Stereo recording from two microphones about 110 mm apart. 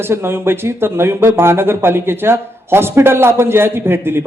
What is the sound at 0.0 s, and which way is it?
Speech, 20° right (ahead or behind).